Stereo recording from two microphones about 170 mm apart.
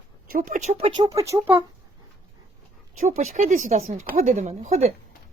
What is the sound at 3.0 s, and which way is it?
Speech, 45° right (ahead or behind).